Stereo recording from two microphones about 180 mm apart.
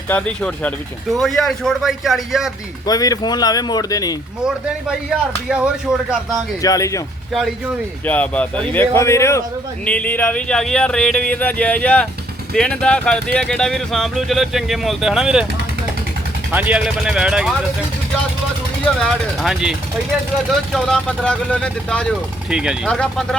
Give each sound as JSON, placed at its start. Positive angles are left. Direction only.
{"t": 0.1, "sound": "speech", "side_deg": 5}
{"t": 2.8, "sound": "speech", "side_deg": 20}
{"t": 5.5, "sound": "speech", "side_deg": -5}
{"t": 6.6, "sound": "speech", "side_deg": 20}
{"t": 8.0, "sound": "speech", "side_deg": 10}
{"t": 16.5, "sound": "speech", "side_deg": -10}
{"t": 18.9, "sound": "speech", "side_deg": 0}